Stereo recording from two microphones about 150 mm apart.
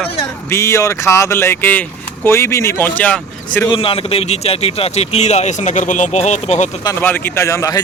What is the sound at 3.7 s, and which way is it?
A man's voice, 40° left (ahead or behind).